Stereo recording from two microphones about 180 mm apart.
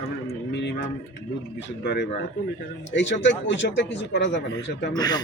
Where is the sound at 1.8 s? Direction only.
65° left (ahead or behind).